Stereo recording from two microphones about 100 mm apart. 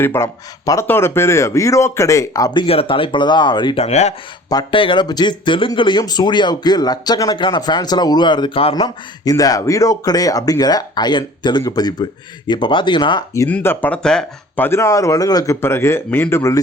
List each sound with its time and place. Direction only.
0.0 s speech: 25° left (ahead or behind)
2.6 s speech: 70° left (ahead or behind); by 3.8 s 50° left (ahead or behind)
3.8 s speech: 90° left
4.7 s speech: 60° left (ahead or behind)
9.2 s speech: 35° left (ahead or behind)
12.5 s speech: 55° left (ahead or behind)
13.5 s speech: 20° left (ahead or behind)
14.6 s speech: 30° left (ahead or behind)
15.6 s speech: 25° left (ahead or behind)